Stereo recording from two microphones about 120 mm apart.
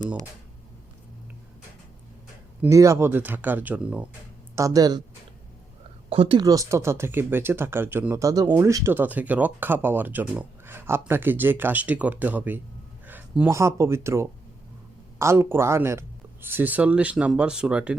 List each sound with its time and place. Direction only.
2.6 s speech: 25° right (ahead or behind)
4.5 s speech: 30° right (ahead or behind)
6.1 s speech: 50° right (ahead or behind)
6.4 s speech: 30° right (ahead or behind)
13.1 s a sound: 15° right (ahead or behind)
13.5 s speech: 25° right (ahead or behind); by 17.9 s 10° right (ahead or behind)